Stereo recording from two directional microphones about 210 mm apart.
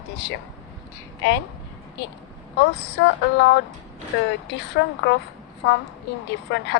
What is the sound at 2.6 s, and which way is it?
Speech, 55° left (ahead or behind).